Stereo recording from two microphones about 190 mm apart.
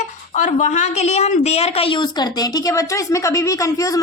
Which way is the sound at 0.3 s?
40° left (ahead or behind).